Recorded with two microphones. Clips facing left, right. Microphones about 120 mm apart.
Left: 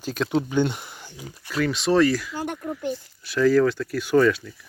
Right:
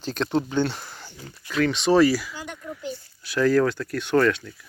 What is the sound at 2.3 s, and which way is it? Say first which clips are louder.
Speech: left 7 dB; 50° left (ahead or behind).